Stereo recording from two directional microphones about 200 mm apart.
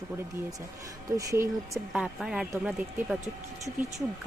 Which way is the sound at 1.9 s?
Centre (ahead or behind).